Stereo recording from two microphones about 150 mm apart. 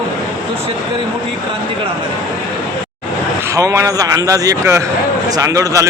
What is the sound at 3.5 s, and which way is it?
A man's voice, 20° right (ahead or behind).